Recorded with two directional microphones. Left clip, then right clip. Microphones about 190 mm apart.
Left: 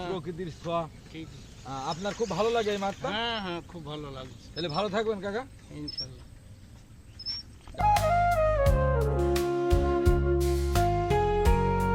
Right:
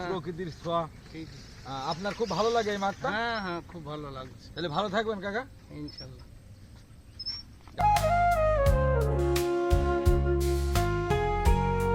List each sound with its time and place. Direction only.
0.0 s speech: 5° right (ahead or behind)
2.0 s speech: 10° left (ahead or behind)
3.1 s speech: 5° right (ahead or behind)
4.5 s a man's voice: 20° left (ahead or behind)
5.7 s speech: centre (ahead or behind)
7.8 s music: centre (ahead or behind)